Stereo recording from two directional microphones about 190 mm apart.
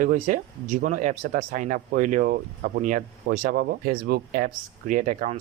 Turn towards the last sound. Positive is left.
turn(degrees=-40)  # may be behind; listen again after turning